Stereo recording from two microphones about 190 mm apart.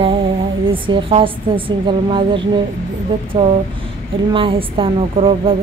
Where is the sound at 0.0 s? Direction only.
25° right (ahead or behind).